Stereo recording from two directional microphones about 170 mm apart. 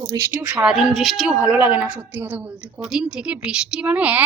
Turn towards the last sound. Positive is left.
turn(degrees=-10)  # may be behind; listen again after turning